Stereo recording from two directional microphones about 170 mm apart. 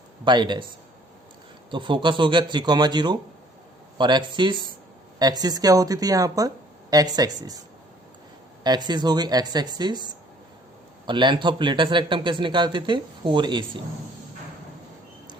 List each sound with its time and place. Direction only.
0.3 s a man's voice: 25° right (ahead or behind)
1.7 s a man's voice: 30° right (ahead or behind)
8.6 s a man's voice: 25° right (ahead or behind)